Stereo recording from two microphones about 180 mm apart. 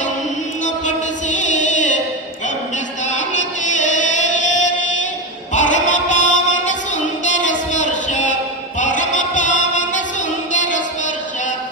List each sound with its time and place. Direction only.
0.7 s music: 40° left (ahead or behind)
3.1 s music: 45° left (ahead or behind)
7.2 s a sound: 45° left (ahead or behind)
8.7 s music: 45° left (ahead or behind)